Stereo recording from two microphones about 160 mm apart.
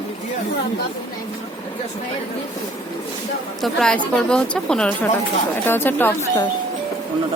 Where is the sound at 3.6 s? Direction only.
5° left (ahead or behind).